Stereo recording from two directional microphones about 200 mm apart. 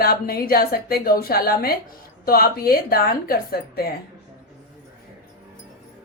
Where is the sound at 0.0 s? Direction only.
50° left (ahead or behind).